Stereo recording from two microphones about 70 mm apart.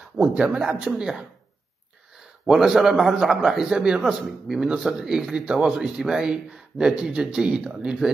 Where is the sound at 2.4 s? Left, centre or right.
Centre.